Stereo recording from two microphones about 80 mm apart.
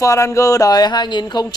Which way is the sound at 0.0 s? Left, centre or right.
Left.